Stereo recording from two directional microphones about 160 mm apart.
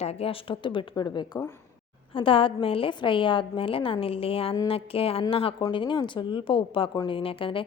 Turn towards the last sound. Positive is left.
turn(degrees=35)  # may be behind; listen again after turning